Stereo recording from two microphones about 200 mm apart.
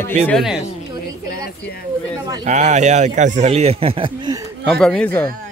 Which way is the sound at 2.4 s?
35° right (ahead or behind).